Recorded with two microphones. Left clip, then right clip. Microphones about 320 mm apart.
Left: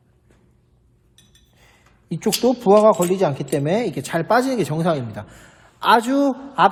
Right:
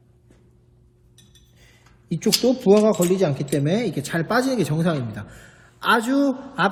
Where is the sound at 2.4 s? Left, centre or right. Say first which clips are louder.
Left 4 dB; centre.